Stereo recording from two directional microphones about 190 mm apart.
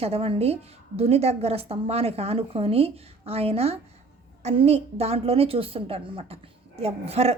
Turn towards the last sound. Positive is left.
turn(degrees=-35)  # may be behind; listen again after turning